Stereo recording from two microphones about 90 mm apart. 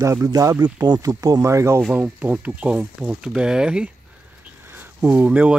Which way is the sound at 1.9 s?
20° right (ahead or behind).